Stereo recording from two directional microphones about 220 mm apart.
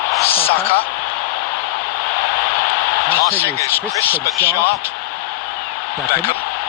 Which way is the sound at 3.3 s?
10° left (ahead or behind).